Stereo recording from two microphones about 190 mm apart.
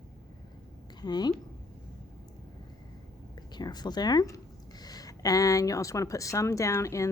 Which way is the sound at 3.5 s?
20° left (ahead or behind).